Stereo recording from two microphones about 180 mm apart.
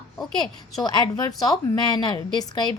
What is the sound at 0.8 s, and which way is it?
A woman's voice, 25° left (ahead or behind).